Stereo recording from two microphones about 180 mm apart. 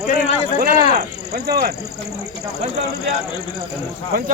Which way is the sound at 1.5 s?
60° right (ahead or behind).